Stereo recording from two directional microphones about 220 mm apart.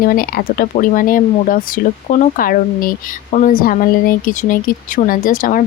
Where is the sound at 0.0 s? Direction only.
40° left (ahead or behind).